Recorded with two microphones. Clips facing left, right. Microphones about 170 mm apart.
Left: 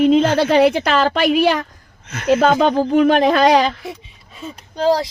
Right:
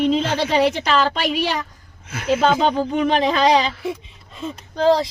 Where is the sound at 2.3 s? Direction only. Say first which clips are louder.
Left 2 dB; 50° left (ahead or behind).